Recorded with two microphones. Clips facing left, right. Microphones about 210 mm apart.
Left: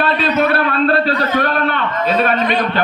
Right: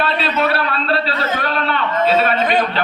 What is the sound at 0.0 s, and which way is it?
A man's voice, 50° left (ahead or behind).